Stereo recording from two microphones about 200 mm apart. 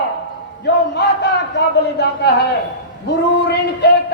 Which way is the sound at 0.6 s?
60° left (ahead or behind).